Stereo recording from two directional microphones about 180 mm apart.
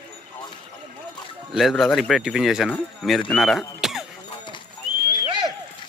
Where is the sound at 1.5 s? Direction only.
Centre (ahead or behind).